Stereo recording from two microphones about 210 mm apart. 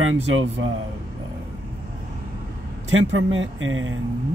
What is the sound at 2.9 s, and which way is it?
Speech, 65° right (ahead or behind).